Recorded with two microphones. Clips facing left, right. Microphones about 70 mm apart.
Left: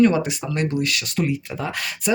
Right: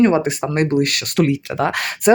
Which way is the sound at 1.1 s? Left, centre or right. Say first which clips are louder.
Right 9 dB; right.